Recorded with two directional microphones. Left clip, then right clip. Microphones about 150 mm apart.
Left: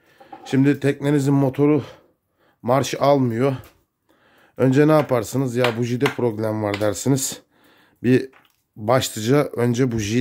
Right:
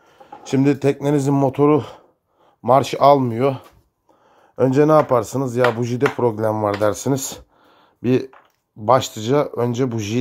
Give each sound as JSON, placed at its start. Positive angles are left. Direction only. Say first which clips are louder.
{"t": 0.2, "sound": "a sound", "louder": "right 1 dB", "side_deg": 0}
{"t": 1.0, "sound": "speech", "louder": "even", "side_deg": 5}
{"t": 2.6, "sound": "speech", "louder": "right 5 dB", "side_deg": 15}